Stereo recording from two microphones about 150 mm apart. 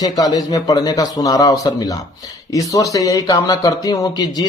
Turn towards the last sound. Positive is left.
turn(degrees=25)  # may be behind; listen again after turning